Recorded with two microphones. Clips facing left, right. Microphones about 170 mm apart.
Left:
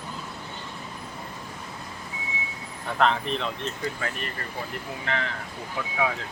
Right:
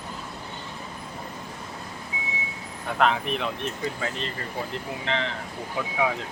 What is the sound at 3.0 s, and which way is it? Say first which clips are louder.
Speech: even; 10° right (ahead or behind).